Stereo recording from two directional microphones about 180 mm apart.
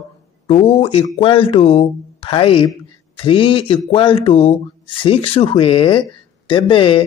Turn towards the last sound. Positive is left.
turn(degrees=30)  # may be behind; listen again after turning